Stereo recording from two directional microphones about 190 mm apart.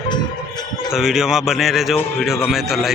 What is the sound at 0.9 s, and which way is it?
Speech, centre (ahead or behind).